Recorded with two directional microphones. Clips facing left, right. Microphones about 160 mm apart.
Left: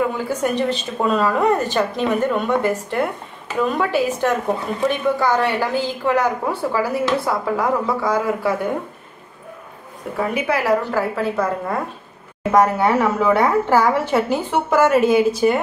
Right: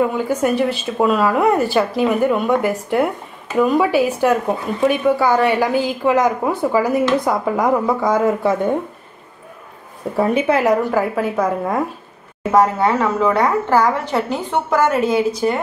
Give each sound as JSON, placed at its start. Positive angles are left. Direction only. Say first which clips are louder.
{"t": 0.3, "sound": "a woman's voice", "louder": "right 3 dB", "side_deg": -10}
{"t": 10.1, "sound": "a woman's voice", "louder": "right 5 dB", "side_deg": -25}
{"t": 10.8, "sound": "a woman's voice", "louder": "right 3 dB", "side_deg": -15}
{"t": 12.5, "sound": "a woman's voice", "louder": "right 1 dB", "side_deg": 5}